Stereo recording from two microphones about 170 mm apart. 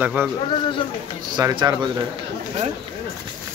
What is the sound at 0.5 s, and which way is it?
Speech, 30° left (ahead or behind).